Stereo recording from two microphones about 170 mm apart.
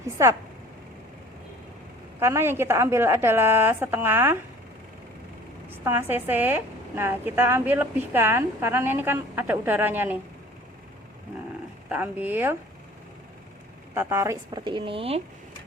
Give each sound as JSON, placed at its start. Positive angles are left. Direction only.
{"t": 0.2, "sound": "a woman's voice", "side_deg": -20}
{"t": 2.1, "sound": "a woman's voice", "side_deg": -15}
{"t": 5.6, "sound": "a woman's voice", "side_deg": -10}
{"t": 11.9, "sound": "a woman's voice", "side_deg": -10}
{"t": 13.9, "sound": "speech", "side_deg": -15}